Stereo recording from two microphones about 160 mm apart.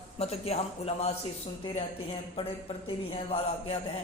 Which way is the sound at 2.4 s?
35° left (ahead or behind).